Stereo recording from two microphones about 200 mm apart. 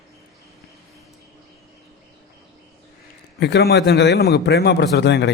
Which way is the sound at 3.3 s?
55° left (ahead or behind).